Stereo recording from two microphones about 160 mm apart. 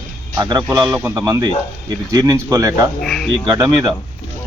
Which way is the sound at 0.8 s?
5° right (ahead or behind).